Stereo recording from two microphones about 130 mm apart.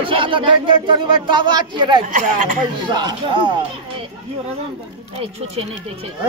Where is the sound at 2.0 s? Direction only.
80° right.